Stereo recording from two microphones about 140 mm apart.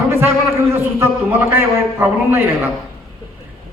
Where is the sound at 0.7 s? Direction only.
15° right (ahead or behind).